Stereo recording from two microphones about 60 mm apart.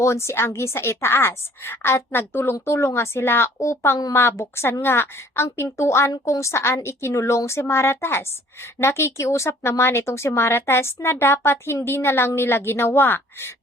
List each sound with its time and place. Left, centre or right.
0.0 s a woman's voice: left
3.6 s a woman's voice: left